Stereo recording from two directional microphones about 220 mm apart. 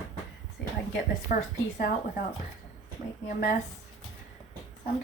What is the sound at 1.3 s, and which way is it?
Speech, 40° left (ahead or behind).